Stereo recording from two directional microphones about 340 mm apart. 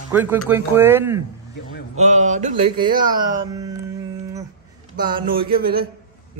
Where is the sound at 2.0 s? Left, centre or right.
Right.